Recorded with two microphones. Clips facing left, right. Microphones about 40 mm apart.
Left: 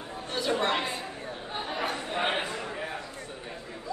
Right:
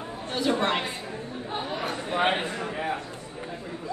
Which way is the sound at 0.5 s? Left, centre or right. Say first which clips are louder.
Right 2 dB; centre.